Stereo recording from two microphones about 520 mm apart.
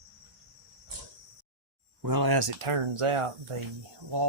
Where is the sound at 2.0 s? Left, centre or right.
Right.